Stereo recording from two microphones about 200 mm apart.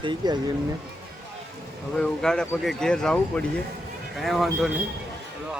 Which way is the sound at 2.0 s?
5° left (ahead or behind).